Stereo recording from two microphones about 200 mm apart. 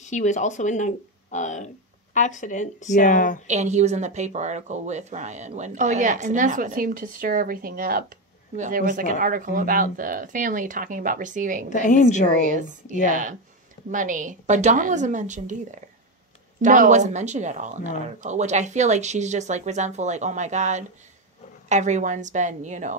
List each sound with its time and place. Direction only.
0.0 s speech: 35° left (ahead or behind)
3.4 s speech: 35° right (ahead or behind)
11.7 s speech: 40° left (ahead or behind)
12.3 s speech: 40° right (ahead or behind)
16.6 s speech: 40° right (ahead or behind)